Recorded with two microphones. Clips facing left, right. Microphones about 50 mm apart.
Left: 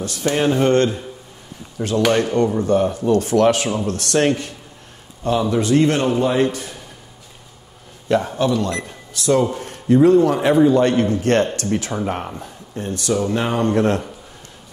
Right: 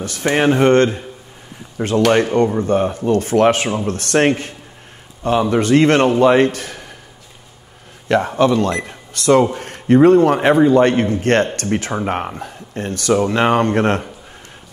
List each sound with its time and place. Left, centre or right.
0.0 s a man's voice: right
8.1 s a man's voice: right
12.4 s a man's voice: right